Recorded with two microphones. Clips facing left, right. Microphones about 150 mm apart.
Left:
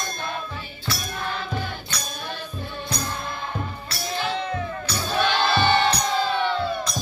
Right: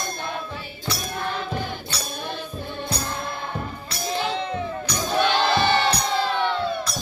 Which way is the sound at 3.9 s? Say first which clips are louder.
Right 2 dB; 20° right (ahead or behind).